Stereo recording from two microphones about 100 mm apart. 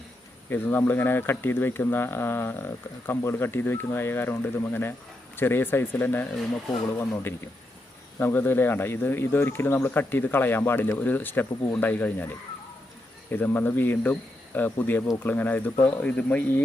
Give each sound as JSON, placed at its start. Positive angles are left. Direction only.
{"t": 0.5, "sound": "speech", "side_deg": 20}
{"t": 15.3, "sound": "speech", "side_deg": 20}